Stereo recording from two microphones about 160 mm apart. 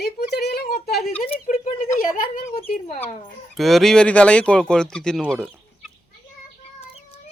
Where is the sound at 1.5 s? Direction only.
50° left (ahead or behind).